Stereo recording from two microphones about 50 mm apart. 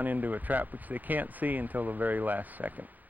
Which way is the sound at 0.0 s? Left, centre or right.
Right.